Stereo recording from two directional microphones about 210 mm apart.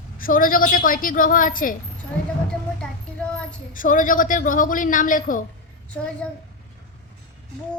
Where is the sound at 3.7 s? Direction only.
40° left (ahead or behind).